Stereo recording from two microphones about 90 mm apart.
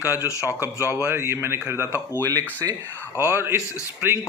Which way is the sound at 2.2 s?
40° right (ahead or behind).